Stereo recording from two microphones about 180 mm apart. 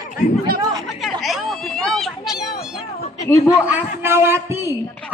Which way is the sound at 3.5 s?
10° right (ahead or behind).